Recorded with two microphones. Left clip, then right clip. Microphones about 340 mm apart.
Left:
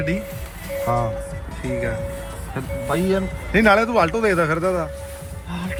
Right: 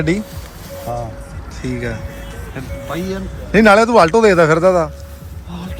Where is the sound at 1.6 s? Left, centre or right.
Centre.